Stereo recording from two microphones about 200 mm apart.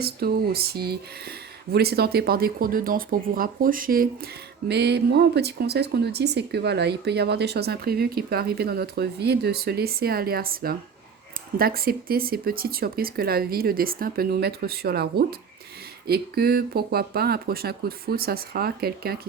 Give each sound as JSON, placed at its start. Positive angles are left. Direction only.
{"t": 0.0, "sound": "speech", "side_deg": -50}